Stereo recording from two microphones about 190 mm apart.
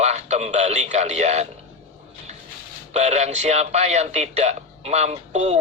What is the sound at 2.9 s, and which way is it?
A man's voice, 35° right (ahead or behind).